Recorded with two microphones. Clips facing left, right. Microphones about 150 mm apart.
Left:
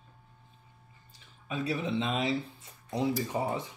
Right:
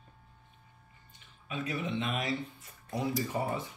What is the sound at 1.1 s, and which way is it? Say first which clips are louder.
Speech: left 3 dB; 35° left (ahead or behind).